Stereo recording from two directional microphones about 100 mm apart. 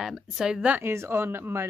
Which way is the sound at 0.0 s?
5° right (ahead or behind).